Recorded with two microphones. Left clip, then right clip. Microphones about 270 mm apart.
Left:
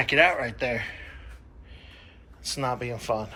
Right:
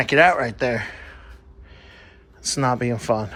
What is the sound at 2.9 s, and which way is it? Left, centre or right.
Speech, right.